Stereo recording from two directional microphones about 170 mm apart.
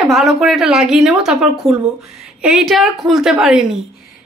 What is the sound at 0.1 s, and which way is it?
A woman's voice, centre (ahead or behind).